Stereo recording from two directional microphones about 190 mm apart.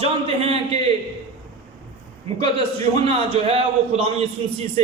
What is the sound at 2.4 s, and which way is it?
A man's voice, 30° right (ahead or behind).